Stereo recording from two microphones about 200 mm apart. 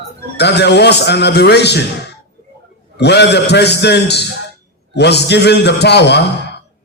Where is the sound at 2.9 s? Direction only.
60° left (ahead or behind).